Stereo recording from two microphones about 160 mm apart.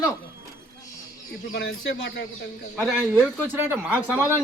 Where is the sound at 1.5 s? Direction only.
90° left.